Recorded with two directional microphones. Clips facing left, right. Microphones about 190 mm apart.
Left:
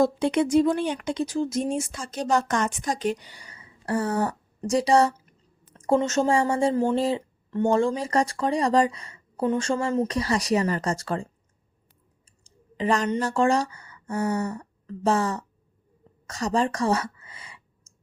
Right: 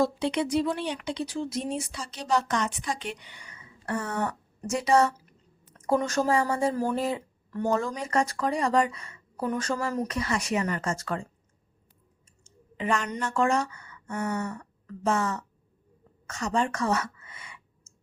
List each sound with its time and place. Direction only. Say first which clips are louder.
0.0 s speech: left 4 dB; 50° left (ahead or behind); by 11.3 s 30° left (ahead or behind)
12.5 s a woman's voice: left 4 dB; 35° left (ahead or behind)
16.2 s clicking: left 3 dB; 35° left (ahead or behind)